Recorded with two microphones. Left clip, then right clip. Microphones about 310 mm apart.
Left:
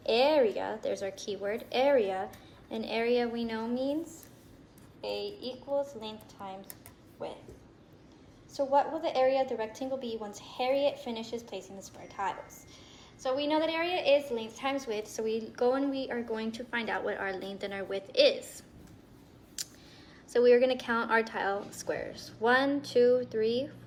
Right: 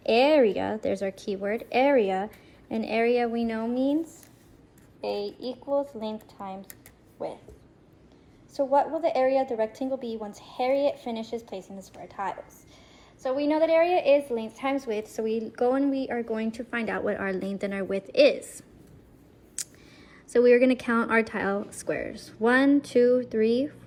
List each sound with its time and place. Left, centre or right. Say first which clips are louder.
0.0 s a woman's voice: right 5 dB; right
4.9 s a woman's voice: right 5 dB; right
8.5 s a woman's voice: right 4 dB; right
19.6 s a sound: right 2 dB; centre
20.3 s a woman's voice: right 4 dB; centre